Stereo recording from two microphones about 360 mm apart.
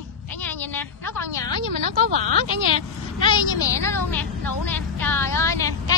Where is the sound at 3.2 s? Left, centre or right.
Centre.